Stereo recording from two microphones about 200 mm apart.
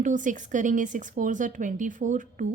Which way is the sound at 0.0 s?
40° right (ahead or behind).